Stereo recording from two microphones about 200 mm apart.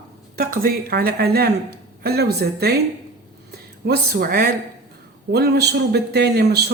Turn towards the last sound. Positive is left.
turn(degrees=-55)  # may be behind; listen again after turning